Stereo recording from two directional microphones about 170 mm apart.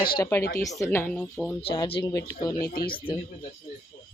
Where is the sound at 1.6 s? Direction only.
30° left (ahead or behind).